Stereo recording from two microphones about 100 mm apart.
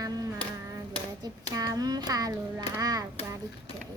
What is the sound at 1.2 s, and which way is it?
Hands, 40° right (ahead or behind).